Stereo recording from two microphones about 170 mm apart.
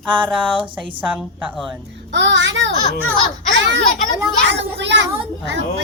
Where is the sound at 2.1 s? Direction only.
90° right.